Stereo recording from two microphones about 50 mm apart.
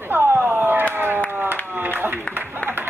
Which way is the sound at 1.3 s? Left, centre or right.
Right.